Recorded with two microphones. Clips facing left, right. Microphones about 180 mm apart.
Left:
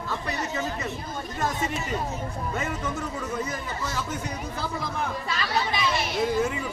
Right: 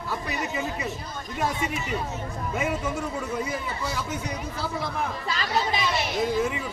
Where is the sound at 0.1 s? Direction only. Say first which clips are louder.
Right 1 dB; 15° right (ahead or behind).